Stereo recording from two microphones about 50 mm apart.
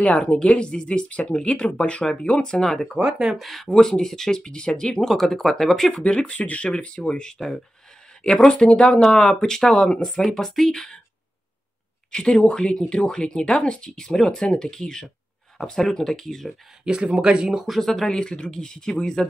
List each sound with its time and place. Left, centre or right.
0.0 s speech: left
3.0 s speech: centre
3.3 s speech: centre
3.6 s speech: centre
5.0 s speech: centre
6.0 s speech: left; by 10.9 s centre
12.1 s speech: centre
16.8 s speech: right
17.6 s speech: centre